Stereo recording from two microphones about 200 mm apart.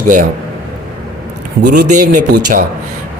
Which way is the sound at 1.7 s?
40° right (ahead or behind).